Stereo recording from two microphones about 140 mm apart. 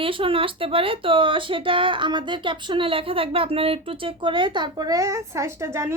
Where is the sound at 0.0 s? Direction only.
40° right (ahead or behind).